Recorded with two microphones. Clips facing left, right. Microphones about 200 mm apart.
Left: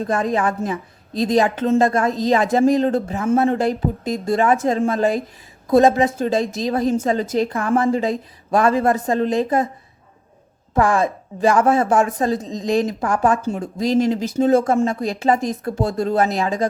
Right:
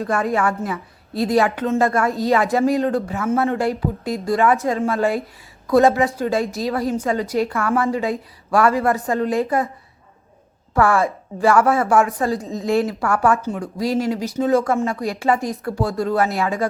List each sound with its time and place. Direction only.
0.0 s speech: 20° left (ahead or behind)
1.5 s speech: 30° left (ahead or behind)
1.8 s a woman's voice: 20° left (ahead or behind)
10.8 s speech: 20° left (ahead or behind)